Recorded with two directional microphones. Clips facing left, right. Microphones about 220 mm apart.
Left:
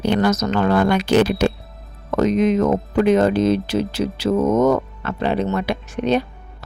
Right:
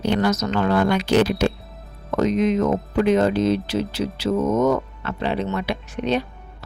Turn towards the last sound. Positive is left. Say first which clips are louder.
# left 3 dB
turn(degrees=45)  # may be behind; listen again after turning